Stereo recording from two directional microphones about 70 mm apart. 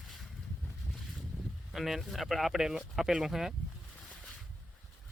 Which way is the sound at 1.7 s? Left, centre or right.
Centre.